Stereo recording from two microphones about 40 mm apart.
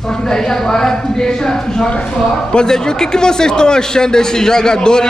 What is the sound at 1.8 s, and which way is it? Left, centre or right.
A man's voice, left.